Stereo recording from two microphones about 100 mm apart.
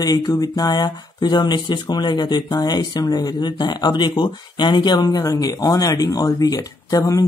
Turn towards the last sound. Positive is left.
turn(degrees=40)  # may be behind; listen again after turning